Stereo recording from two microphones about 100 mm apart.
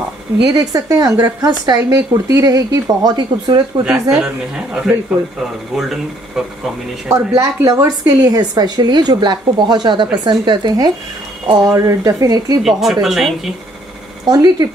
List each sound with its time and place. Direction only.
0.5 s speech: 35° right (ahead or behind)
5.8 s speech: 5° right (ahead or behind)
7.1 s a woman's voice: 35° right (ahead or behind)
12.6 s speech: 5° right (ahead or behind)
14.2 s speech: 40° right (ahead or behind)